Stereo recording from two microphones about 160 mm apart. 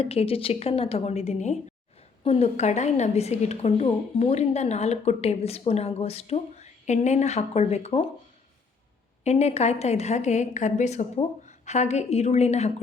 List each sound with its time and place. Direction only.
0.0 s a woman's voice: 40° left (ahead or behind)
9.2 s a woman's voice: 45° left (ahead or behind)